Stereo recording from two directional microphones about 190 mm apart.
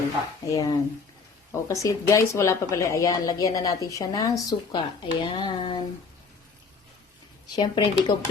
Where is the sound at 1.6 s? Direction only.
15° left (ahead or behind).